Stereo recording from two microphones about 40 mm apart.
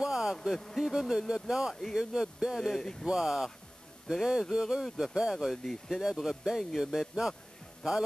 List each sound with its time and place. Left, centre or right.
0.0 s a sound: centre
0.6 s speech: centre
0.9 s speech: centre
1.8 s speech: centre
2.1 s speech: centre
2.8 s speech: centre
3.1 s speech: centre
5.6 s speech: centre
5.9 s speech: centre